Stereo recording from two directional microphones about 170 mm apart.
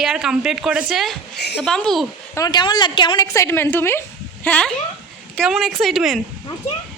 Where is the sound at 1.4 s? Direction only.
80° left.